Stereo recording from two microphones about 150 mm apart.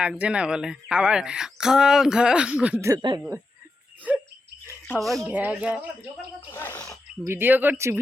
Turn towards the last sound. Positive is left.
turn(degrees=-15)  # may be behind; listen again after turning